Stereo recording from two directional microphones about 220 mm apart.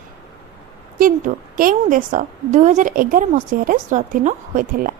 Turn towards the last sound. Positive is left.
turn(degrees=-40)  # may be behind; listen again after turning